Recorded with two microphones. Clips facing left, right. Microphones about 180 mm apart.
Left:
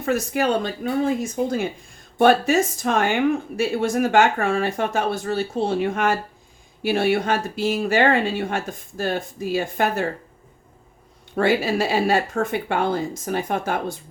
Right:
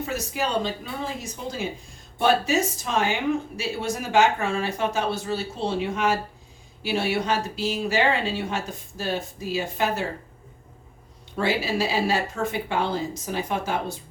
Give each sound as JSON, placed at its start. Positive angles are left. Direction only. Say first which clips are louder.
{"t": 0.0, "sound": "speech", "louder": "left 6 dB", "side_deg": 55}
{"t": 11.3, "sound": "speech", "louder": "left 5 dB", "side_deg": 55}